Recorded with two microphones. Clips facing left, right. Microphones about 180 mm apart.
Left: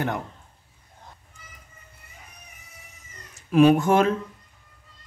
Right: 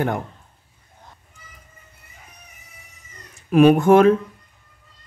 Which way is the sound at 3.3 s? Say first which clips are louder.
Right 3 dB; 60° right (ahead or behind).